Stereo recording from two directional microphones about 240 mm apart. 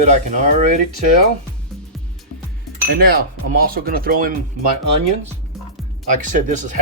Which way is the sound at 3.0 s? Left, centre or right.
Right.